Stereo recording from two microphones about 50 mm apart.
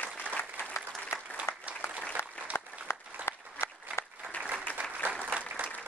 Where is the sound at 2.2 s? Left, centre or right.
Left.